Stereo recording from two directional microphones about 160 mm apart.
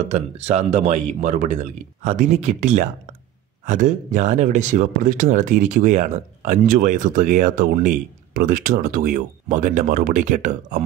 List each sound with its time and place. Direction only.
0.0 s speech: 45° right (ahead or behind)